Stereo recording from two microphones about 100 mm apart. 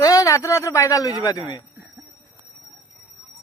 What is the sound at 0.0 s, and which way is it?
A man's voice, 30° left (ahead or behind).